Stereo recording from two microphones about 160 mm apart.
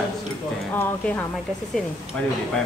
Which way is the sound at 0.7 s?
10° left (ahead or behind).